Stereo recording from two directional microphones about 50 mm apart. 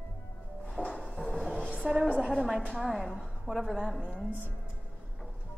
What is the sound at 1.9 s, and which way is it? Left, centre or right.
A man's voice, right.